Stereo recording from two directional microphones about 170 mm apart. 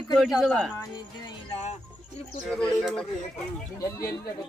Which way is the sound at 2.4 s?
5° left (ahead or behind).